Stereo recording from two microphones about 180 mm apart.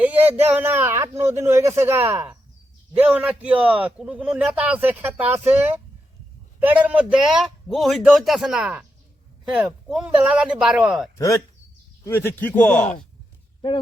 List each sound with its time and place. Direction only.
0.0 s a man's voice: 10° right (ahead or behind)
11.2 s a man's voice: 20° left (ahead or behind)